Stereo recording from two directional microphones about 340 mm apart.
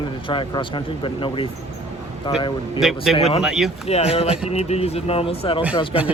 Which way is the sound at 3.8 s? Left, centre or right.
Centre.